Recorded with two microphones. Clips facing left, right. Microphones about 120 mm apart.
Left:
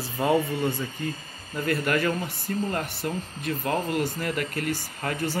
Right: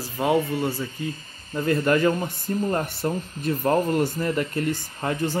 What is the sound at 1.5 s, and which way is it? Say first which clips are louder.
Speech: right 4 dB; 25° right (ahead or behind).